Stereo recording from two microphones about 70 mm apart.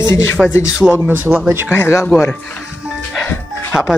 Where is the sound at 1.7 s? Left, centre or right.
Left.